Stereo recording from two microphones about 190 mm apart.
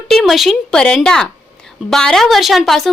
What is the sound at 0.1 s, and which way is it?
A woman's voice, centre (ahead or behind).